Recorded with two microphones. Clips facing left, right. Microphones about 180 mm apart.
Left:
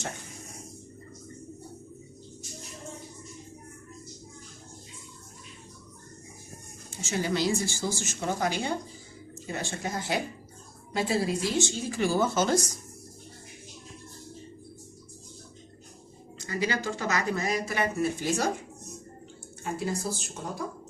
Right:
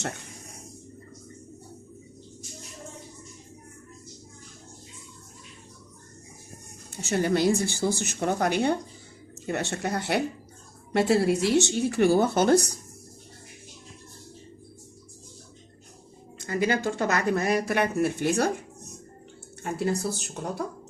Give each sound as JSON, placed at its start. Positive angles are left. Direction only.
{"t": 6.9, "sound": "speech", "side_deg": -60}
{"t": 16.4, "sound": "speech", "side_deg": -55}
{"t": 19.7, "sound": "speech", "side_deg": -65}